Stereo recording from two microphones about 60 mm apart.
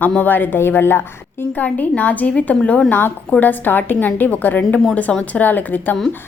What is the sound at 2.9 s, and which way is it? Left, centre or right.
A woman's voice, left.